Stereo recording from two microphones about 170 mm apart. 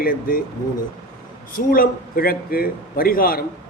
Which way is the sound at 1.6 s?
60° left (ahead or behind).